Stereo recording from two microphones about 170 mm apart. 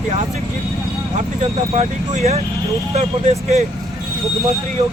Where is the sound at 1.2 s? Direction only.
35° right (ahead or behind).